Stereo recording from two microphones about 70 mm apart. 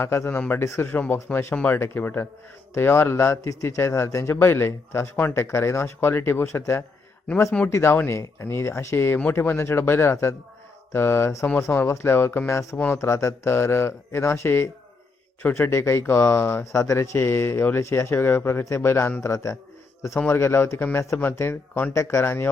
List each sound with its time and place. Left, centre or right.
0.0 s a man's voice: left
0.3 s a man's voice: left
12.9 s speech: left
16.7 s a man's voice: left
20.1 s a man's voice: left
20.4 s speech: left
21.9 s speech: left